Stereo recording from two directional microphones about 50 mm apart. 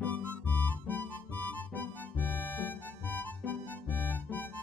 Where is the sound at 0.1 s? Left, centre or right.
Left.